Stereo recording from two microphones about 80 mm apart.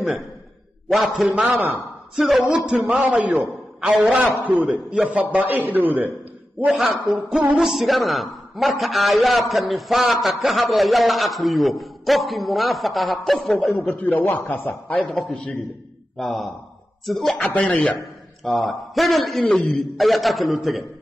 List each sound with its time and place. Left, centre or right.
0.8 s a man's voice: centre
2.4 s a man's voice: centre
4.0 s speech: centre
4.9 s a man's voice: centre
5.3 s speech: right
6.7 s a man's voice: centre
13.7 s a man's voice: centre
15.0 s a man's voice: centre
17.4 s speech: centre
18.4 s a man's voice: centre